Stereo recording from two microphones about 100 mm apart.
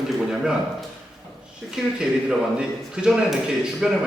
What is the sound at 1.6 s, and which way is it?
A man's voice, centre (ahead or behind).